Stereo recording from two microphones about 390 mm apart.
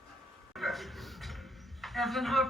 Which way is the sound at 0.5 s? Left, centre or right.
Centre.